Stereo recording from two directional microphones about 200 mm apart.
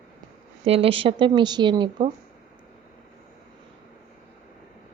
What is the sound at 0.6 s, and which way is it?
A woman's voice, 30° right (ahead or behind).